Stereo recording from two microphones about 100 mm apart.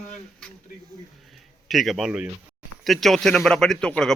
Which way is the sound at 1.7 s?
Centre (ahead or behind).